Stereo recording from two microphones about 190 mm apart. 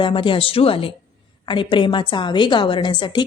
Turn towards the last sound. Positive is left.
turn(degrees=25)  # may be behind; listen again after turning